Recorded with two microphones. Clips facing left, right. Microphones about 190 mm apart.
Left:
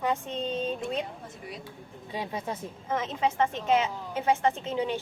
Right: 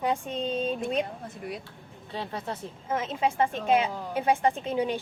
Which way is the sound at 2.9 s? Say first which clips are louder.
Right 1 dB; 10° right (ahead or behind).